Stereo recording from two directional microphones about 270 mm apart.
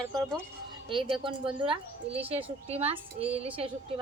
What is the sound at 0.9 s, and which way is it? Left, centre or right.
Speech, centre.